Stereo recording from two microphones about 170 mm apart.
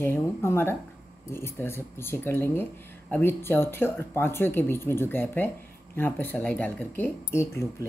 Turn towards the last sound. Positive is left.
turn(degrees=15)  # may be behind; listen again after turning